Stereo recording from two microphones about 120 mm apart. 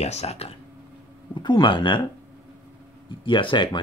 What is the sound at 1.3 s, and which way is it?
Speech, 40° left (ahead or behind).